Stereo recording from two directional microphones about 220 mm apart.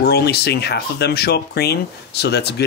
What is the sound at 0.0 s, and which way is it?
Speech, 45° left (ahead or behind).